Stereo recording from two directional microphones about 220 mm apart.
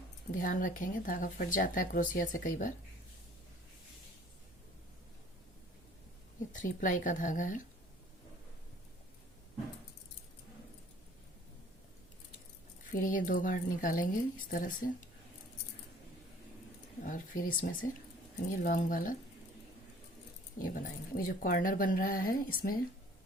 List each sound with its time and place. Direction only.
0.3 s speech: 40° left (ahead or behind)
6.5 s speech: 35° left (ahead or behind)
12.9 s speech: 40° left (ahead or behind)
17.0 s speech: 40° left (ahead or behind)
20.6 s speech: 40° left (ahead or behind)